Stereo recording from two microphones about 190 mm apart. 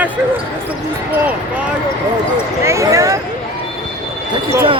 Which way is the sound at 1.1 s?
10° right (ahead or behind).